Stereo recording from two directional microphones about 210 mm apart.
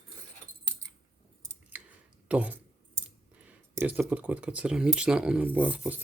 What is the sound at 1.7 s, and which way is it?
Clicking, 5° right (ahead or behind).